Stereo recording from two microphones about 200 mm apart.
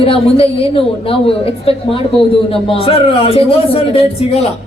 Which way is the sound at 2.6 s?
30° left (ahead or behind).